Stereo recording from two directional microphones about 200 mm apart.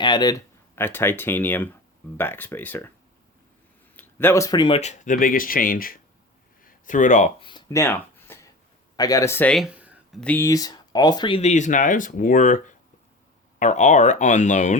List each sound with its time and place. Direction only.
0.0 s speech: 20° left (ahead or behind)
3.9 s speech: 10° left (ahead or behind); by 7.3 s 40° left (ahead or behind)
7.4 s a sound: 20° left (ahead or behind)
9.0 s speech: 15° left (ahead or behind); by 10.2 s 5° right (ahead or behind)
10.2 s speech: 10° left (ahead or behind); by 14.8 s 35° left (ahead or behind)